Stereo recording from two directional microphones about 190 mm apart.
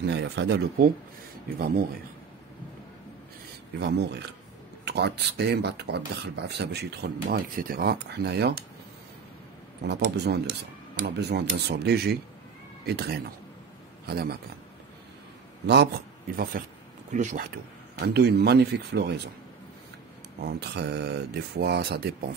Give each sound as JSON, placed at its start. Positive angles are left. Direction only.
{"t": 0.0, "sound": "speech", "side_deg": -65}
{"t": 3.8, "sound": "speech", "side_deg": -65}
{"t": 9.8, "sound": "speech", "side_deg": -60}
{"t": 15.6, "sound": "speech", "side_deg": -60}
{"t": 17.1, "sound": "speech", "side_deg": -40}
{"t": 17.9, "sound": "speech", "side_deg": -60}
{"t": 20.4, "sound": "speech", "side_deg": -60}